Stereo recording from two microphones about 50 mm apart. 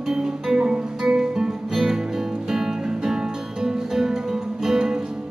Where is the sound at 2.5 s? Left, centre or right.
Centre.